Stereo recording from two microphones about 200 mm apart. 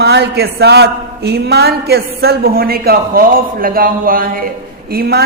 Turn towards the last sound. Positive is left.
turn(degrees=-50)  # may be behind; listen again after turning